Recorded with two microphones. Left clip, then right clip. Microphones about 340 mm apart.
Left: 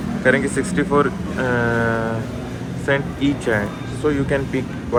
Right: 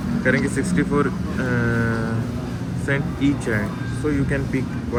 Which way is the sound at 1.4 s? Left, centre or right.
Left.